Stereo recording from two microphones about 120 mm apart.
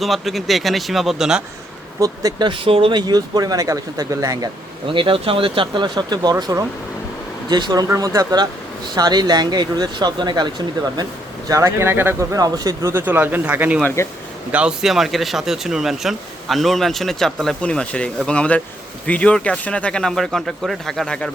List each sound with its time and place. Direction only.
0.0 s speech: centre (ahead or behind)
2.0 s speech: 30° right (ahead or behind); by 3.0 s 50° right (ahead or behind)
3.1 s speech: 35° right (ahead or behind)
4.9 s speech: 45° right (ahead or behind)
11.4 s speech: 25° right (ahead or behind)
12.4 s speech: 30° right (ahead or behind)
12.9 s speech: 20° right (ahead or behind)
13.8 s speech: 20° left (ahead or behind)
14.5 s speech: 10° right (ahead or behind)